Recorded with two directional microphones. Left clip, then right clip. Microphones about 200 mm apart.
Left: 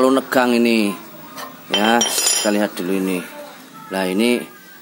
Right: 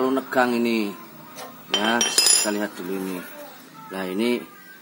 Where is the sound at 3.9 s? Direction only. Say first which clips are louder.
Left 7 dB; 30° left (ahead or behind).